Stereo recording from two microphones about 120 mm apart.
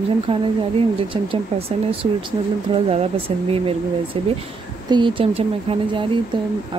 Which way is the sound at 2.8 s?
55° right (ahead or behind).